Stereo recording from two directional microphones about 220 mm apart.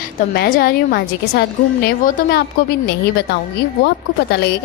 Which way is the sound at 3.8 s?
50° left (ahead or behind).